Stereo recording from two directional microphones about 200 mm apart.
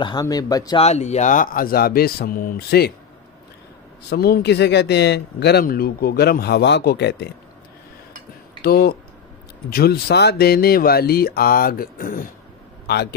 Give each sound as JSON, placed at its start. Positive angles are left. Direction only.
{"t": 0.0, "sound": "speech", "side_deg": 20}
{"t": 0.8, "sound": "speech", "side_deg": 35}
{"t": 4.1, "sound": "speech", "side_deg": 50}
{"t": 8.6, "sound": "a man's voice", "side_deg": 50}